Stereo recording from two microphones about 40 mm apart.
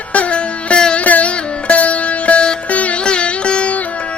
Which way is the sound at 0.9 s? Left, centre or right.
Left.